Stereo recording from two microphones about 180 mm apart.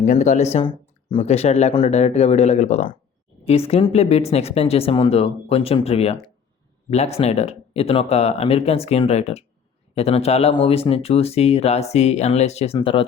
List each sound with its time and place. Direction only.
0.0 s speech: 45° left (ahead or behind)